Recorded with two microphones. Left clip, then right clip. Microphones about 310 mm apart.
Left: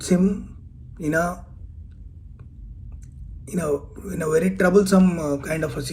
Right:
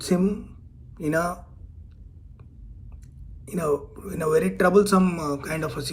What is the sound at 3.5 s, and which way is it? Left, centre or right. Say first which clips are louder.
Speech: even; left.